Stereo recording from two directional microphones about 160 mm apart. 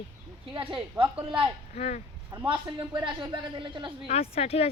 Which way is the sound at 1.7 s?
40° left (ahead or behind).